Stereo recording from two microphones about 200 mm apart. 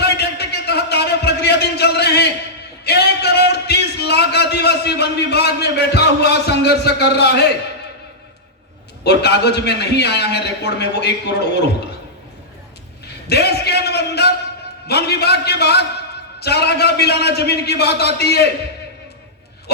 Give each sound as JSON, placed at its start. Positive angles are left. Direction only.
{"t": 0.0, "sound": "a sound", "side_deg": 55}
{"t": 9.0, "sound": "a man's voice", "side_deg": 55}
{"t": 13.2, "sound": "a man's voice", "side_deg": 55}